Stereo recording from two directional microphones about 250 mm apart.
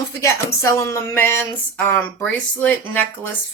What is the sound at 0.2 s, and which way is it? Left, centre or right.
Speech, centre.